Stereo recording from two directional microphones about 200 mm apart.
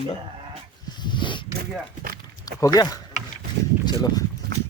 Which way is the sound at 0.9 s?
25° left (ahead or behind).